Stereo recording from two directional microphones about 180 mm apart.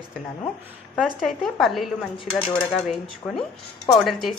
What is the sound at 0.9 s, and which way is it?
A woman's voice, centre (ahead or behind).